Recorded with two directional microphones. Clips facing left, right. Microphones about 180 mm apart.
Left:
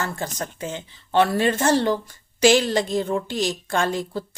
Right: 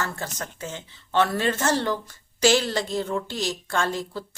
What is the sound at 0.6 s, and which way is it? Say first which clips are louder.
A woman's voice: left 4 dB; 15° left (ahead or behind).